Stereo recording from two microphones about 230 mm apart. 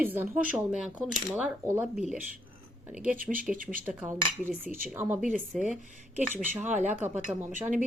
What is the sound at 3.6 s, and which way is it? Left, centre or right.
Cutlery, right.